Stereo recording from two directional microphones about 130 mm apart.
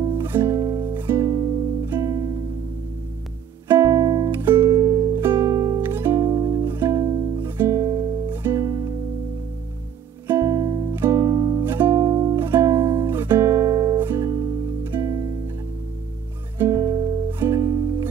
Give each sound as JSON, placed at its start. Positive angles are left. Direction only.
{"t": 0.3, "sound": "music", "side_deg": -20}
{"t": 3.6, "sound": "music", "side_deg": -20}
{"t": 4.3, "sound": "music", "side_deg": -15}
{"t": 6.7, "sound": "music", "side_deg": -15}
{"t": 7.0, "sound": "music", "side_deg": -30}
{"t": 7.3, "sound": "music", "side_deg": -15}
{"t": 8.3, "sound": "music", "side_deg": -15}
{"t": 8.6, "sound": "music", "side_deg": -25}
{"t": 10.2, "sound": "music", "side_deg": -20}
{"t": 10.9, "sound": "music", "side_deg": -20}
{"t": 11.6, "sound": "music", "side_deg": -15}
{"t": 16.5, "sound": "music", "side_deg": -25}